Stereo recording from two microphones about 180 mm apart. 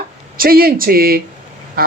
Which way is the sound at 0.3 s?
55° right (ahead or behind).